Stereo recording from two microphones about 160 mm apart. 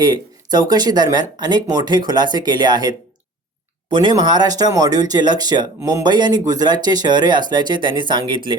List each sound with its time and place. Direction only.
0.0 s speech: 25° right (ahead or behind)